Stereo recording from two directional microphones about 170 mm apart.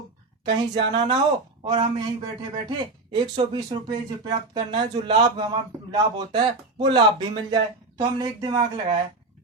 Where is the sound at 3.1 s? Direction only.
30° right (ahead or behind).